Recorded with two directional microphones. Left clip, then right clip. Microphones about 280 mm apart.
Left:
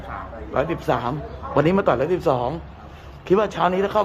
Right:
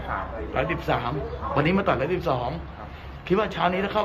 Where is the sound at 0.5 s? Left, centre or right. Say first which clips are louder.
Left 4 dB; left.